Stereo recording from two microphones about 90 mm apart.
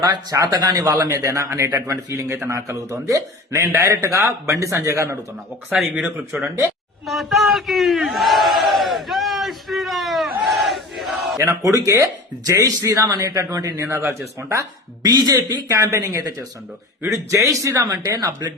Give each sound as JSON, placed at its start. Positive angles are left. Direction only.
{"t": 0.0, "sound": "speech", "side_deg": -50}
{"t": 0.9, "sound": "speech", "side_deg": -35}
{"t": 5.9, "sound": "speech", "side_deg": -15}
{"t": 7.1, "sound": "battle cry", "side_deg": 0}
{"t": 11.4, "sound": "speech", "side_deg": -35}